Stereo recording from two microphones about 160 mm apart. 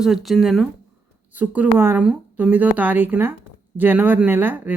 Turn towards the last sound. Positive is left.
turn(degrees=-10)  # may be behind; listen again after turning